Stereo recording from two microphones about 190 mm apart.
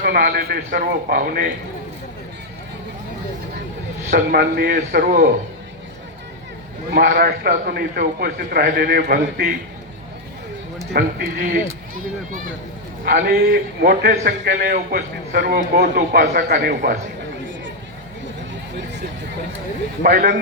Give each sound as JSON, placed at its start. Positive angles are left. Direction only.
{"t": 0.0, "sound": "a man's voice", "side_deg": -55}
{"t": 4.1, "sound": "a man's voice", "side_deg": -50}
{"t": 6.9, "sound": "a man's voice", "side_deg": -55}
{"t": 10.9, "sound": "a man's voice", "side_deg": -50}
{"t": 13.1, "sound": "a man's voice", "side_deg": -50}
{"t": 20.0, "sound": "a man's voice", "side_deg": -50}